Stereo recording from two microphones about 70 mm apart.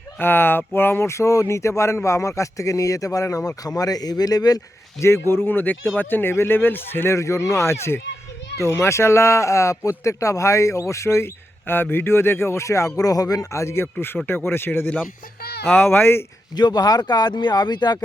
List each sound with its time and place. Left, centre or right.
0.2 s speech: left
4.9 s speech: left
7.2 s speech: left
13.5 s speech: left
16.6 s speech: left